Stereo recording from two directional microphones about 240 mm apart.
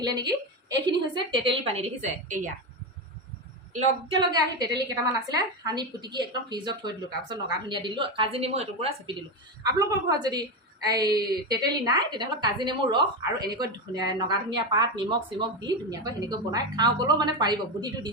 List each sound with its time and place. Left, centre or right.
0.0 s a woman's voice: centre
4.1 s a woman's voice: centre